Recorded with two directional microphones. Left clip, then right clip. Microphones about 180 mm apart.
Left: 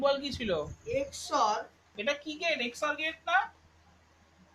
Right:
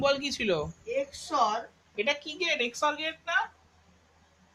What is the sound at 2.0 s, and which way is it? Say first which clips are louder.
Speech: right 3 dB; 35° right (ahead or behind).